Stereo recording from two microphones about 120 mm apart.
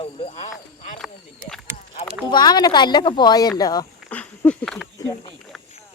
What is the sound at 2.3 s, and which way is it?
Speech, 35° left (ahead or behind).